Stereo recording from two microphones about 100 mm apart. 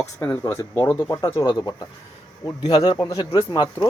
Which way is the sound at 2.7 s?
50° left (ahead or behind).